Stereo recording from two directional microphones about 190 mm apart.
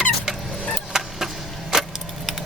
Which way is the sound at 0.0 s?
Centre (ahead or behind).